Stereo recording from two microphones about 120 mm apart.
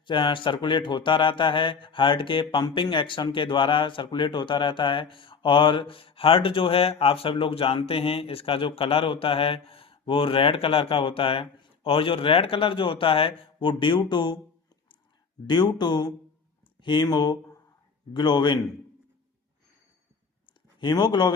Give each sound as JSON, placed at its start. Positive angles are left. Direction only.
{"t": 0.0, "sound": "speech", "side_deg": 40}
{"t": 15.4, "sound": "speech", "side_deg": 35}
{"t": 20.5, "sound": "a sound", "side_deg": 40}